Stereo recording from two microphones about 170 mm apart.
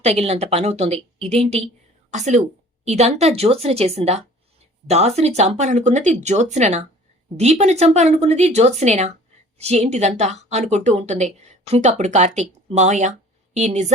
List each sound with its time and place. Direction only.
0.0 s a woman's voice: 40° right (ahead or behind)